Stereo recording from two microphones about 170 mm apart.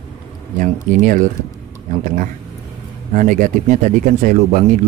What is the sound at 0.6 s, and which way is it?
Speech, 50° right (ahead or behind).